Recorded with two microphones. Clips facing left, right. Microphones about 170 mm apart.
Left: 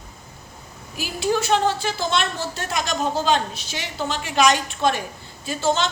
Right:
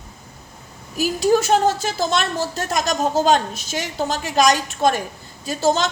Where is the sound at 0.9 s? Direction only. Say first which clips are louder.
Right 6 dB; 40° right (ahead or behind).